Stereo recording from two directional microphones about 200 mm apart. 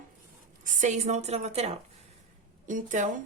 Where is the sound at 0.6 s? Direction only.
40° right (ahead or behind).